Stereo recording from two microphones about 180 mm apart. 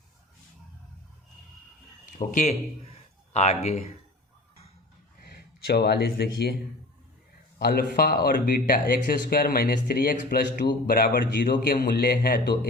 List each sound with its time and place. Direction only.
2.1 s speech: 40° left (ahead or behind)
5.2 s speech: 60° left (ahead or behind)
7.6 s speech: 55° left (ahead or behind)